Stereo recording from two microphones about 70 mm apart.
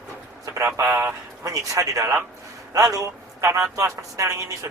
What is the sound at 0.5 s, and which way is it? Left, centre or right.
Speech, right.